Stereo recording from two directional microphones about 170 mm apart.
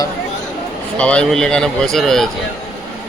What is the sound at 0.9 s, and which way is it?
Speech, 5° left (ahead or behind).